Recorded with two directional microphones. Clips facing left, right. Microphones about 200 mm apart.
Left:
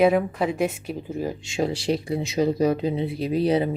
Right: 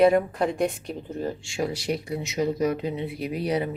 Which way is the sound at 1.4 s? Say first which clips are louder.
Left 3 dB; 25° left (ahead or behind).